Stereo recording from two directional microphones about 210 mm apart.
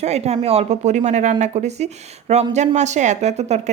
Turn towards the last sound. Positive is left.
turn(degrees=-30)  # may be behind; listen again after turning